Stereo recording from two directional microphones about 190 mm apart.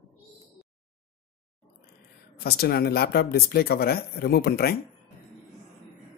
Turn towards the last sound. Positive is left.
turn(degrees=55)  # may be behind; listen again after turning